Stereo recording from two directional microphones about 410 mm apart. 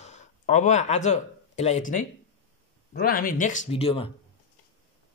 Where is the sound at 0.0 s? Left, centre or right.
Centre.